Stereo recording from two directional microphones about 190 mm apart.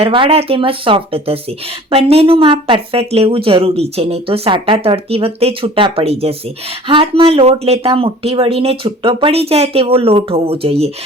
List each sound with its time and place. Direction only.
0.0 s speech: 30° right (ahead or behind)